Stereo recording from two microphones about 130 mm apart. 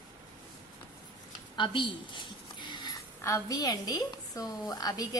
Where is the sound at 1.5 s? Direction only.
40° left (ahead or behind).